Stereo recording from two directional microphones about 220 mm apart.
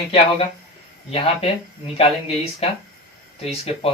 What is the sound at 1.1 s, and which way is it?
A man's voice, 25° left (ahead or behind).